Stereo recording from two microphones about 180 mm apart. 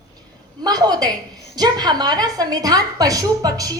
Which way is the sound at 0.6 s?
20° right (ahead or behind).